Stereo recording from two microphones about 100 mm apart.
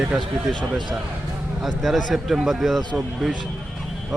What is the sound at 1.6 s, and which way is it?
Speech, centre (ahead or behind).